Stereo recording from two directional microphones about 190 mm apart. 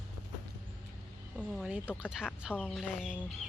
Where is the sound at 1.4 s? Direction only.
5° right (ahead or behind).